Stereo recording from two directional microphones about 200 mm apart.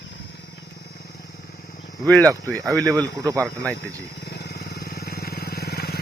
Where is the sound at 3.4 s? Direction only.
5° left (ahead or behind).